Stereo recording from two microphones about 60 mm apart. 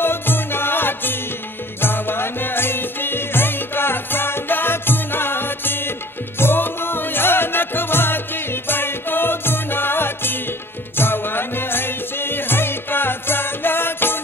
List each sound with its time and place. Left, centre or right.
0.0 s music: left